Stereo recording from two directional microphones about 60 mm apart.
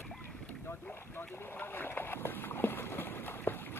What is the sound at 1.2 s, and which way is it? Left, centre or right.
Boat, left.